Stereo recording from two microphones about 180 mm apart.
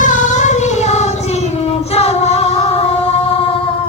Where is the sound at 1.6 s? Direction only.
35° left (ahead or behind).